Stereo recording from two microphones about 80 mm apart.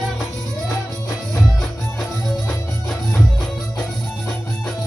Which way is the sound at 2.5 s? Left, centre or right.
Left.